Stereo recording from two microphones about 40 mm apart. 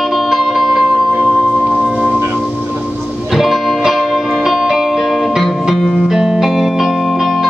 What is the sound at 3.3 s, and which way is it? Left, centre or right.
Music, centre.